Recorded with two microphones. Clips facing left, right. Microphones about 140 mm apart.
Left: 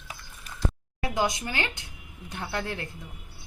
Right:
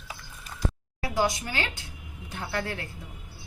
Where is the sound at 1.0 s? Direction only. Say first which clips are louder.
Right 1 dB; 20° left (ahead or behind).